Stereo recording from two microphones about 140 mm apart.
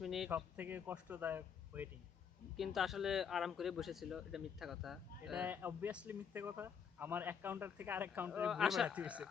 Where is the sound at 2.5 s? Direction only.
Centre (ahead or behind).